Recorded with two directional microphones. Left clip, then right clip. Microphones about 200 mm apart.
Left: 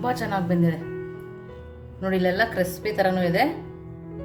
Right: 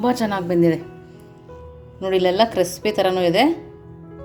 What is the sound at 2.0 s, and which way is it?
Speech, 25° right (ahead or behind).